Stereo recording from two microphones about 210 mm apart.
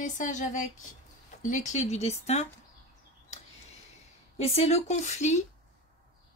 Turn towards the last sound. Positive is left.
turn(degrees=35)  # may be behind; listen again after turning